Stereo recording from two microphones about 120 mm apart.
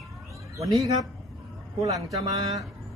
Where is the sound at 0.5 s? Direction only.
30° right (ahead or behind).